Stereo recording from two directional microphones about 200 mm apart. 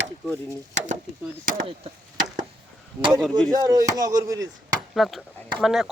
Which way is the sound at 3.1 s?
Centre (ahead or behind).